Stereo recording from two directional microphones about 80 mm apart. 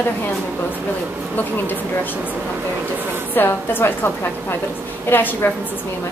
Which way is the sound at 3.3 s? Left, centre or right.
Left.